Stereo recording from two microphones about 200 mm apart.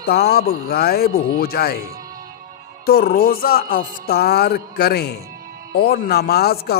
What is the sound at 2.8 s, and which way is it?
Speech, 50° left (ahead or behind).